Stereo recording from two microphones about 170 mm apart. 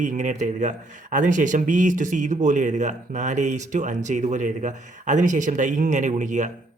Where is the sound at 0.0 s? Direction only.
45° right (ahead or behind).